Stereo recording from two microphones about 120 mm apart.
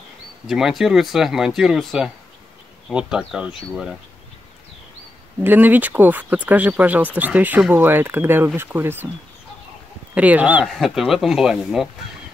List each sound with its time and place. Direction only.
0.5 s speech: 5° right (ahead or behind)
5.4 s speech: 15° right (ahead or behind)
10.1 s speech: 10° right (ahead or behind)
10.7 s speech: centre (ahead or behind)